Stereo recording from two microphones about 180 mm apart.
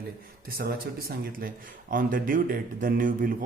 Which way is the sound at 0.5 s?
60° right (ahead or behind).